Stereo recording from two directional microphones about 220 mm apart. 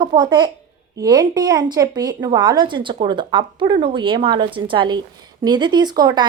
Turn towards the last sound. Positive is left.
turn(degrees=-20)  # may be behind; listen again after turning